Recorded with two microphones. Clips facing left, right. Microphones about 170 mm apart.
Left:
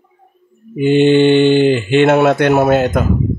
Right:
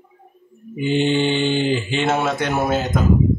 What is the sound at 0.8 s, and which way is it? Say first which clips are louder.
Speech: left 9 dB; 60° left (ahead or behind).